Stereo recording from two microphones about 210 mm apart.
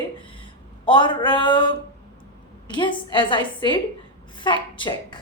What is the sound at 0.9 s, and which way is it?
Speech, 20° left (ahead or behind).